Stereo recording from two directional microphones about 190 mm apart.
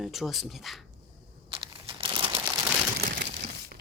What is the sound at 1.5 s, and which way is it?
Crumpling, 25° right (ahead or behind).